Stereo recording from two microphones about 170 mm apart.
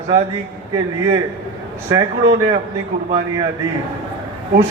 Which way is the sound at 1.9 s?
30° right (ahead or behind).